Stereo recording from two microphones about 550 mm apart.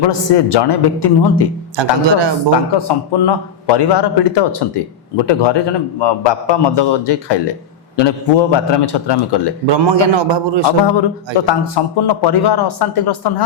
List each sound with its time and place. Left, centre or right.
0.1 s a man's voice: left
1.7 s a man's voice: right
2.7 s a man's voice: left
9.6 s a man's voice: right
11.3 s a man's voice: left